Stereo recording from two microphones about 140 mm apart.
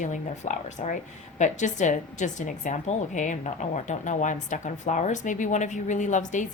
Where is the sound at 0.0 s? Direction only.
60° left (ahead or behind).